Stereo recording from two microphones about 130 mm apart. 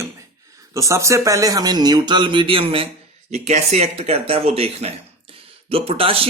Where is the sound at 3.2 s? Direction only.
60° right (ahead or behind).